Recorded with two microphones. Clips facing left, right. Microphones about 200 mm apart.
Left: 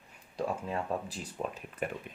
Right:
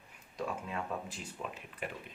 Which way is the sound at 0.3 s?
35° left (ahead or behind).